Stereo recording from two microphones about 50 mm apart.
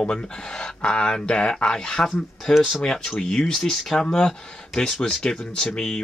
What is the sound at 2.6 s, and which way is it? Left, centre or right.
Speech, centre.